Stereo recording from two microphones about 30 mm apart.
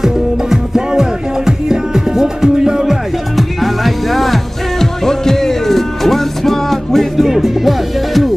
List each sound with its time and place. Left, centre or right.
0.0 s music: centre
3.3 s music: centre
4.7 s music: centre
7.2 s music: centre